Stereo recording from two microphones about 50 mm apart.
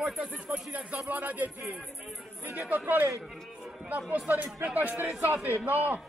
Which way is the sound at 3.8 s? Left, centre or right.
Right.